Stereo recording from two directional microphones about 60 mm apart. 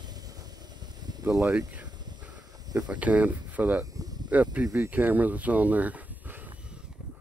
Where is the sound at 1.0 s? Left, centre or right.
Right.